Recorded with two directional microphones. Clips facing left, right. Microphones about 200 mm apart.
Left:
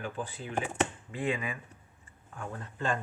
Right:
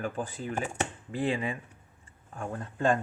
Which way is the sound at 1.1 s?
35° right (ahead or behind).